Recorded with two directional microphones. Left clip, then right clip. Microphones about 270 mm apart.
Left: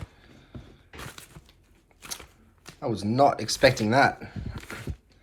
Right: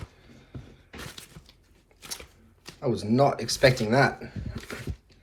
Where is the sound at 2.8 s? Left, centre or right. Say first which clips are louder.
Left 1 dB; left.